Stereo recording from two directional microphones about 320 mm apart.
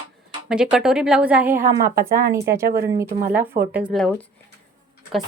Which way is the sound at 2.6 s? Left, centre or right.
Right.